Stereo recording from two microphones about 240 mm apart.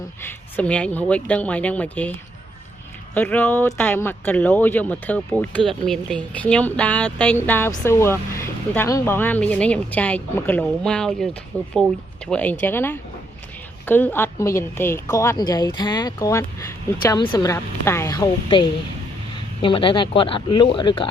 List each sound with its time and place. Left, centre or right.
0.3 s speech: centre
3.2 s speech: centre